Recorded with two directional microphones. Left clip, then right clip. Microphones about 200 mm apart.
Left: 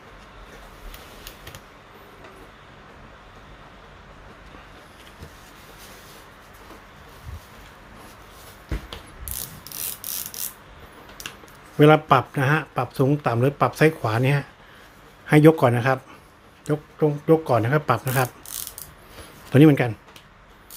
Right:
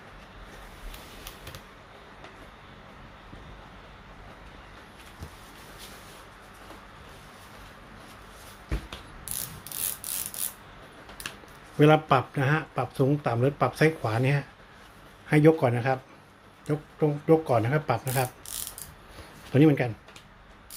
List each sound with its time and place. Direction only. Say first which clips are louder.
11.8 s a man's voice: left 5 dB; 10° left (ahead or behind)
19.5 s a man's voice: left 6 dB; 20° left (ahead or behind)